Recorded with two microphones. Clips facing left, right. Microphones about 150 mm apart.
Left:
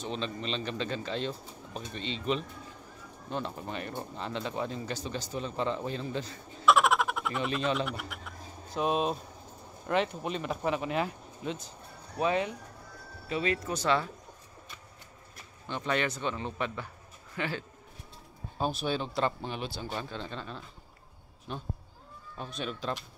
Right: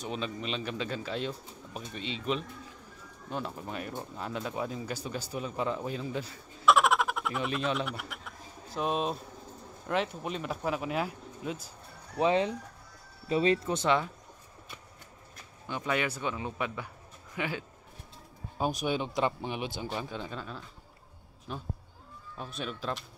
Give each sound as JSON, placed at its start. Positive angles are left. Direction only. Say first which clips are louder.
{"t": 0.0, "sound": "speech", "louder": "even", "side_deg": -5}
{"t": 12.2, "sound": "speech", "louder": "right 3 dB", "side_deg": -25}
{"t": 15.7, "sound": "a man's voice", "louder": "even", "side_deg": -10}